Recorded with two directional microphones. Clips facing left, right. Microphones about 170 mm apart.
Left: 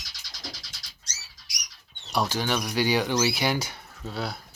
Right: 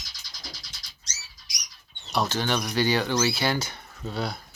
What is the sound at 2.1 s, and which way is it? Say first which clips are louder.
Speech: even; 10° left (ahead or behind).